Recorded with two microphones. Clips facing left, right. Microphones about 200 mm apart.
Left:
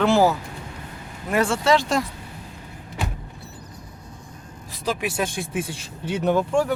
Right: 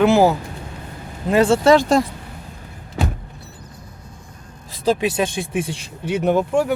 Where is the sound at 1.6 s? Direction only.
45° right (ahead or behind).